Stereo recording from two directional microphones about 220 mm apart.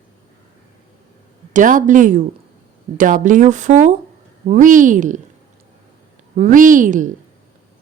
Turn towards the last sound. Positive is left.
turn(degrees=-35)  # may be behind; listen again after turning